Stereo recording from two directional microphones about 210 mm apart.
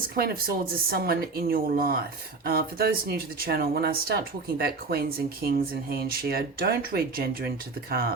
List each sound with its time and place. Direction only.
0.2 s speech: 45° right (ahead or behind)